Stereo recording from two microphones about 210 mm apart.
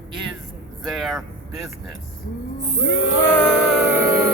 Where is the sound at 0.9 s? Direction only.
Centre (ahead or behind).